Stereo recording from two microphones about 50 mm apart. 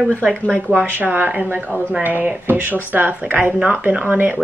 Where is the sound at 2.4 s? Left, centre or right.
Right.